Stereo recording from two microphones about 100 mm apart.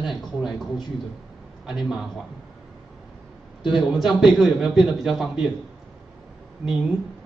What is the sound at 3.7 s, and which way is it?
A man's voice, centre (ahead or behind).